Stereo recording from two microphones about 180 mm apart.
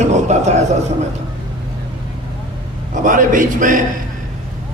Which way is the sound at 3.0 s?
45° right (ahead or behind).